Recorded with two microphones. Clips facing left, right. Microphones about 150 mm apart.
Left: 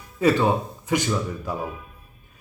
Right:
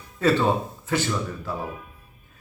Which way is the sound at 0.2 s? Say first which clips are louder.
Left 1 dB; 15° left (ahead or behind).